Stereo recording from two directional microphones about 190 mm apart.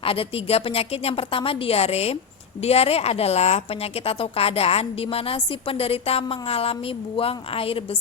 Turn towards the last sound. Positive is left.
turn(degrees=30)  # may be behind; listen again after turning